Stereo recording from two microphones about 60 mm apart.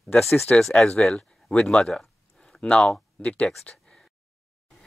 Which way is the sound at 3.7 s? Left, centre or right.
Centre.